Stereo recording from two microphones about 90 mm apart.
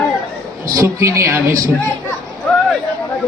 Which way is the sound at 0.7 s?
35° right (ahead or behind).